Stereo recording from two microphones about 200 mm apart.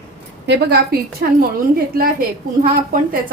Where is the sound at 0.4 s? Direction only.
55° right (ahead or behind).